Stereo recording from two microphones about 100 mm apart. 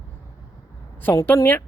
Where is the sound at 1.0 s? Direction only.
20° left (ahead or behind).